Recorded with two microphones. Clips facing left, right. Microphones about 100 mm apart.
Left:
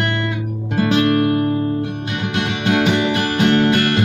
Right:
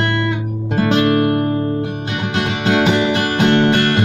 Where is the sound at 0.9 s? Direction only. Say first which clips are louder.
Right 1 dB; 35° right (ahead or behind).